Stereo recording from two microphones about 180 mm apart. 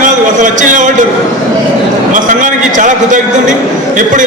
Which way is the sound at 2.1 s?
45° right (ahead or behind).